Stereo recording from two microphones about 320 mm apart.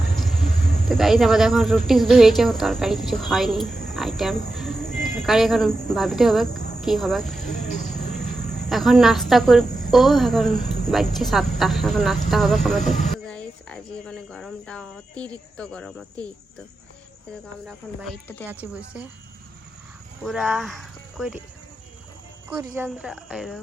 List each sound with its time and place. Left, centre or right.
0.2 s speech: centre
7.5 s speech: left
7.9 s speech: centre
17.7 s speech: centre
20.2 s speech: centre
22.4 s speech: centre